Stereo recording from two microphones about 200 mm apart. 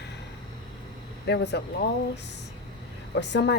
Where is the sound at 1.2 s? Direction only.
55° left (ahead or behind).